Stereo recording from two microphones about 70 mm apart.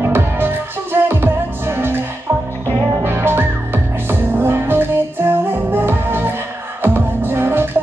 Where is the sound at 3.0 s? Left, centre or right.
Right.